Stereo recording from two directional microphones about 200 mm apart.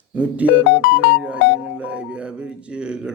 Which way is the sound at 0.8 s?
55° left (ahead or behind).